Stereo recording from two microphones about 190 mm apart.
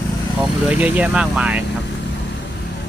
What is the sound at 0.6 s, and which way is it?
Speech, 5° right (ahead or behind).